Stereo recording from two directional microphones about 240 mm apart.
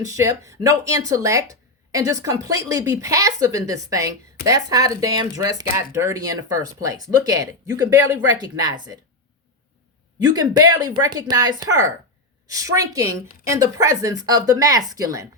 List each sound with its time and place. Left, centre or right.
0.0 s speech: centre
10.2 s speech: centre